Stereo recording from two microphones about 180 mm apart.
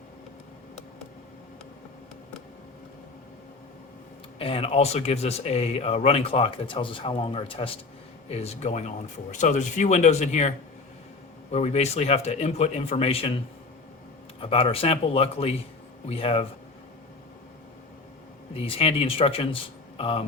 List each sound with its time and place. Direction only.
4.4 s speech: 30° left (ahead or behind)
11.5 s speech: 35° left (ahead or behind)
14.4 s speech: 30° left (ahead or behind)
18.5 s speech: 30° left (ahead or behind)